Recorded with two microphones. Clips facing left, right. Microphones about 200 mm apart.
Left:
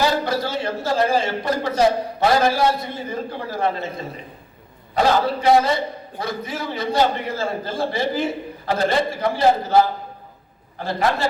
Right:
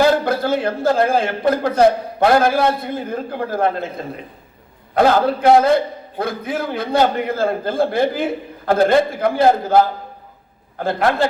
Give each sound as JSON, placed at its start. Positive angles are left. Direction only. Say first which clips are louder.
{"t": 0.0, "sound": "a man's voice", "louder": "right 5 dB", "side_deg": -55}